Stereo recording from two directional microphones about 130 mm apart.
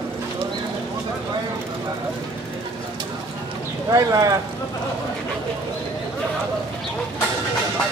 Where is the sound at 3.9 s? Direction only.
25° right (ahead or behind).